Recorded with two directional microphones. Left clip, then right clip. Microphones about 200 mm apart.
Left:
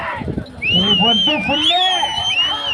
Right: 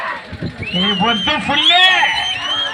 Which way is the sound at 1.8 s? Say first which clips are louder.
Right 5 dB; 45° left (ahead or behind).